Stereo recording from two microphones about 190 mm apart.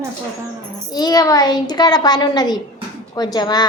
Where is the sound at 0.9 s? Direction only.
20° left (ahead or behind).